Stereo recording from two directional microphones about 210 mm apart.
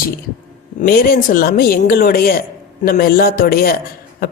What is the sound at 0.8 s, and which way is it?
Speech, 45° left (ahead or behind).